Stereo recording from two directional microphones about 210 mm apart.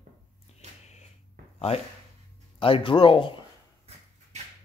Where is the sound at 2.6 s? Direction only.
25° left (ahead or behind).